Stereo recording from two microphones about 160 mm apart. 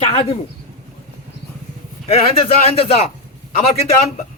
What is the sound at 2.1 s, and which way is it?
A man's voice, 40° left (ahead or behind).